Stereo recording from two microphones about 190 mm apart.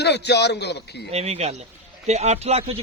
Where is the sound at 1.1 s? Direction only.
35° right (ahead or behind).